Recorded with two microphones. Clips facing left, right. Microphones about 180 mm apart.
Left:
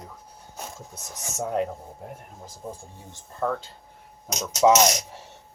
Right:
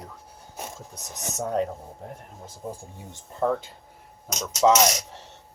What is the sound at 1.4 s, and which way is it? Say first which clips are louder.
Speech: even; 5° left (ahead or behind).